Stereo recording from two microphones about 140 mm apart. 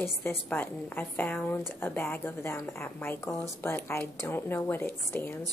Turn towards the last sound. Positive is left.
turn(degrees=15)  # may be behind; listen again after turning